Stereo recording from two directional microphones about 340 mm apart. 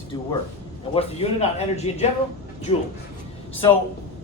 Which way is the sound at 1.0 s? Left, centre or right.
Centre.